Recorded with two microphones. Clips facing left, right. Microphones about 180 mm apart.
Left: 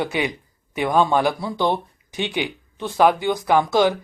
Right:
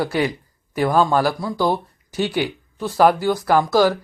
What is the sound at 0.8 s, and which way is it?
Speech, 5° right (ahead or behind).